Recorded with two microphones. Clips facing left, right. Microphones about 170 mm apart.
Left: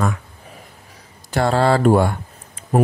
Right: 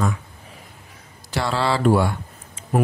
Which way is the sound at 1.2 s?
50° left (ahead or behind).